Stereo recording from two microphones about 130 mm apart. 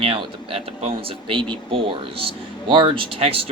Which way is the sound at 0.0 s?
45° right (ahead or behind).